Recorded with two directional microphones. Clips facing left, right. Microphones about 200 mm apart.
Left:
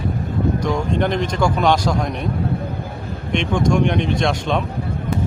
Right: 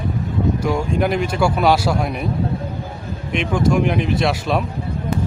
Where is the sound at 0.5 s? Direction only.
5° right (ahead or behind).